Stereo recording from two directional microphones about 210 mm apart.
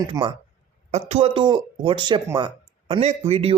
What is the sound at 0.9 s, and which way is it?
Speech, 30° right (ahead or behind).